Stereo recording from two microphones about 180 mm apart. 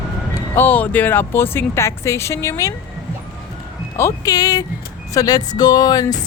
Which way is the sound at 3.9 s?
15° left (ahead or behind).